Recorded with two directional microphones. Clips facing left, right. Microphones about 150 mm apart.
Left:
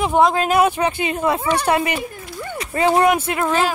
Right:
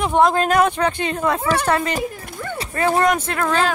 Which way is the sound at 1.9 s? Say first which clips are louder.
Right 2 dB; 55° right (ahead or behind).